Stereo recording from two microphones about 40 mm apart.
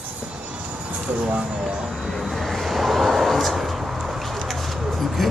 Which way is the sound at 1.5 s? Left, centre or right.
Centre.